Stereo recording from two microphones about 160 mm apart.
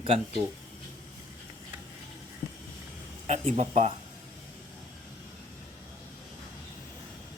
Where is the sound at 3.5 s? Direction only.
45° right (ahead or behind).